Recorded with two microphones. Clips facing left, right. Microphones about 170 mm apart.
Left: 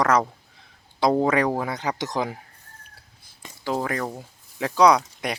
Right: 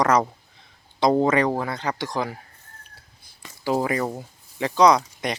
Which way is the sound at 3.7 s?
10° right (ahead or behind).